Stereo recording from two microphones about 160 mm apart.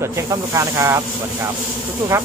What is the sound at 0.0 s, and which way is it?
Speech, 20° right (ahead or behind).